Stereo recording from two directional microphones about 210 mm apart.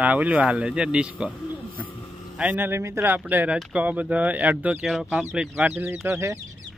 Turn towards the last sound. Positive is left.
turn(degrees=-10)  # may be behind; listen again after turning